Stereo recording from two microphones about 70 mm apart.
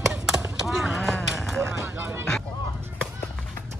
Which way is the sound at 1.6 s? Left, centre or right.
Right.